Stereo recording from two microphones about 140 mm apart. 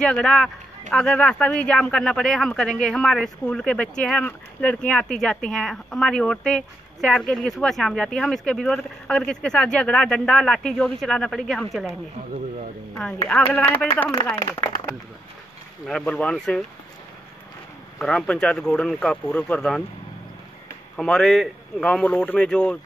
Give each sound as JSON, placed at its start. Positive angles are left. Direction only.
{"t": 0.0, "sound": "speech", "side_deg": 5}
{"t": 13.3, "sound": "speech", "side_deg": 10}
{"t": 15.9, "sound": "speech", "side_deg": 5}
{"t": 17.9, "sound": "speech", "side_deg": 5}
{"t": 20.9, "sound": "speech", "side_deg": 5}